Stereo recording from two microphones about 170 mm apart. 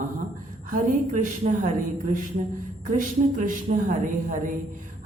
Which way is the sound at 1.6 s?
50° right (ahead or behind).